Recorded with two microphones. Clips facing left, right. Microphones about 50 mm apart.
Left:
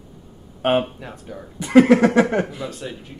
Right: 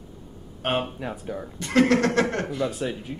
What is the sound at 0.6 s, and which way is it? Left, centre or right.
Speech, centre.